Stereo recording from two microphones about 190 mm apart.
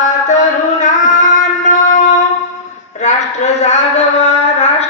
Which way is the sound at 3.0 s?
35° left (ahead or behind).